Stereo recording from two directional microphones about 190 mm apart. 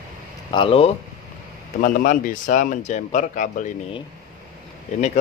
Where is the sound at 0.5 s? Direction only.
30° left (ahead or behind).